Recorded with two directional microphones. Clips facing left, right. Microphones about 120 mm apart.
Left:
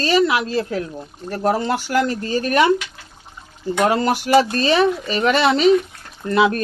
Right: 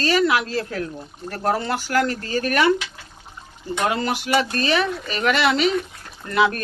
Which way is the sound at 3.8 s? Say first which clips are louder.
Left 4 dB; 40° left (ahead or behind).